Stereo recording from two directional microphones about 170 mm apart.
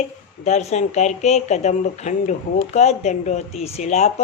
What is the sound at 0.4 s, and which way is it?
Speech, 40° left (ahead or behind).